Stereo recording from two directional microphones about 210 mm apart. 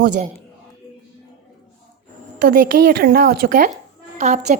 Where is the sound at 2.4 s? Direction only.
45° right (ahead or behind).